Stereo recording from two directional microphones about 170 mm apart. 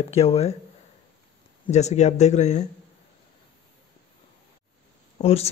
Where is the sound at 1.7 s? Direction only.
40° left (ahead or behind).